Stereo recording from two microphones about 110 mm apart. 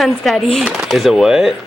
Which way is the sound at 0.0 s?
Centre (ahead or behind).